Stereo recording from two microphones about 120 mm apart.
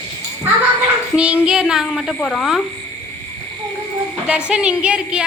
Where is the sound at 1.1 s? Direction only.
10° right (ahead or behind).